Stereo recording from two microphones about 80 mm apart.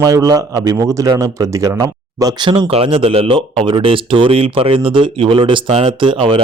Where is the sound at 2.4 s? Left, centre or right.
Right.